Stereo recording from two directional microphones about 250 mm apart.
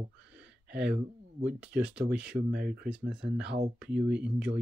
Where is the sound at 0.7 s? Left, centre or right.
Right.